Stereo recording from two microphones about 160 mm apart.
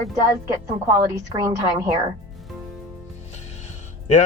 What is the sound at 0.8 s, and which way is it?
A woman's voice, 15° right (ahead or behind).